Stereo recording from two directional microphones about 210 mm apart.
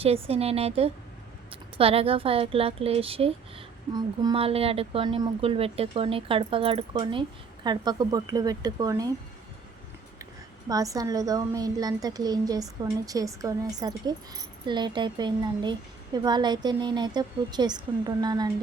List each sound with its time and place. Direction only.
0.0 s a woman's voice: 30° right (ahead or behind)
10.7 s a woman's voice: 15° right (ahead or behind)